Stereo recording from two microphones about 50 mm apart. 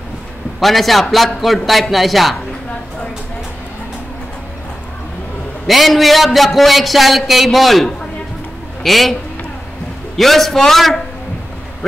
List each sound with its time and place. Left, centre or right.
0.6 s a man's voice: centre
5.7 s a man's voice: centre
10.1 s a man's voice: centre